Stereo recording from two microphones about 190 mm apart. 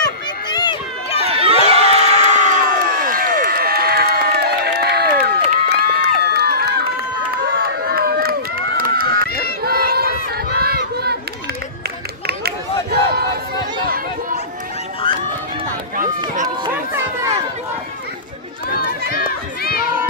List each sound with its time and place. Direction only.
0.0 s run: 25° left (ahead or behind)
1.2 s crowd: 30° right (ahead or behind); by 5.3 s 55° right (ahead or behind)
5.7 s run: 60° right (ahead or behind)
9.6 s a sound: 55° right (ahead or behind)
13.8 s chatter: 50° right (ahead or behind)
16.4 s chatter: 20° right (ahead or behind)